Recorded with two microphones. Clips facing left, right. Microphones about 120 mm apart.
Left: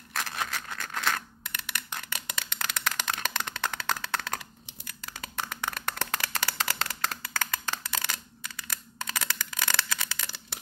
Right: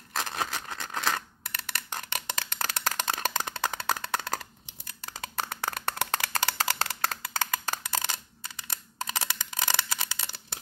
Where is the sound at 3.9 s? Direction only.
10° right (ahead or behind).